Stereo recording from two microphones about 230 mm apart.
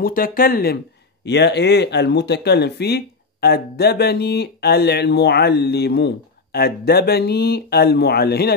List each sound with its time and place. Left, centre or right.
0.0 s speech: left